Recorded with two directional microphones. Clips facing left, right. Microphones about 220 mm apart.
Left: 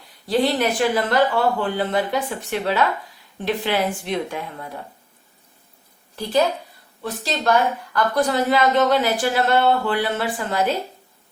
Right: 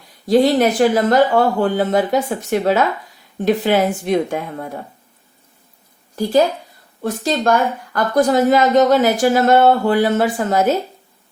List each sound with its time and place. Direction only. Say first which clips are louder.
0.3 s speech: right 7 dB; 45° right (ahead or behind)
7.0 s speech: right 6 dB; 45° right (ahead or behind)